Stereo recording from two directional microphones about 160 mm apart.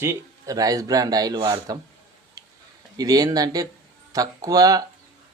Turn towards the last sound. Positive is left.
turn(degrees=-25)  # may be behind; listen again after turning